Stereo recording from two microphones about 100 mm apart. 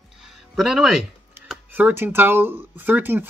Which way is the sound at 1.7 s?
20° right (ahead or behind).